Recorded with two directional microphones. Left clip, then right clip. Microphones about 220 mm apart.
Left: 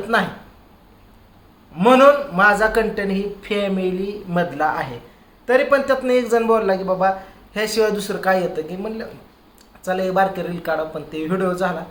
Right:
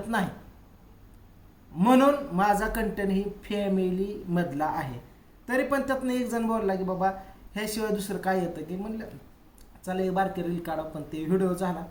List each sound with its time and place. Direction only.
0.1 s speech: centre (ahead or behind)
1.8 s speech: centre (ahead or behind)